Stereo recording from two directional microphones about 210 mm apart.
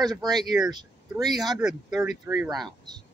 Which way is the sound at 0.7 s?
20° right (ahead or behind).